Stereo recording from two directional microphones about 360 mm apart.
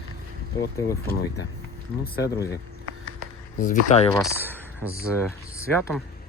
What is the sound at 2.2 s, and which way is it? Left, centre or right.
Speech, centre.